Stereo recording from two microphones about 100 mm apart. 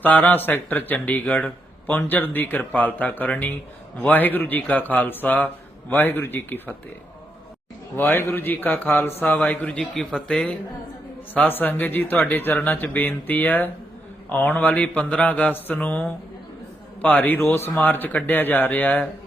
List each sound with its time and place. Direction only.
0.0 s speech: 15° left (ahead or behind)
7.9 s speech: 20° left (ahead or behind)
9.9 s speech: 5° left (ahead or behind)
11.3 s speech: 20° left (ahead or behind)